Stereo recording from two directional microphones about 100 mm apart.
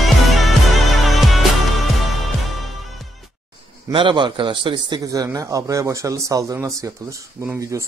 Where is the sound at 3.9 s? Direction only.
55° right (ahead or behind).